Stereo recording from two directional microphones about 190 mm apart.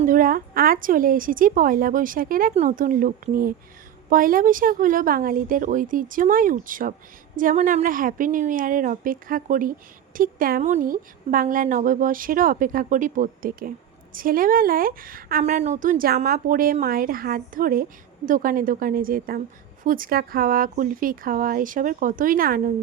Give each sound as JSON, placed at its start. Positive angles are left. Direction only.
{"t": 0.0, "sound": "a woman's voice", "side_deg": -45}